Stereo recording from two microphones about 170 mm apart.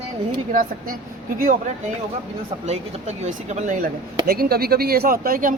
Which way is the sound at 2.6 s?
40° right (ahead or behind).